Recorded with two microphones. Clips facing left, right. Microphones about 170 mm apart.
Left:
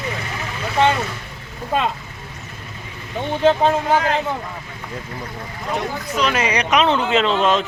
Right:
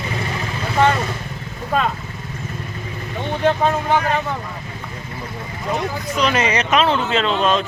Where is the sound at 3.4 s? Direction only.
30° left (ahead or behind).